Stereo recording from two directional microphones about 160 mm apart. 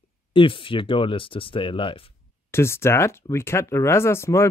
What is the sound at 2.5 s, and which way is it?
Speech, 15° left (ahead or behind).